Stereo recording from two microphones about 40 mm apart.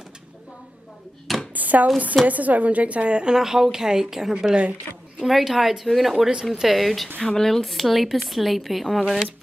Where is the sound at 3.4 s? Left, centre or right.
Centre.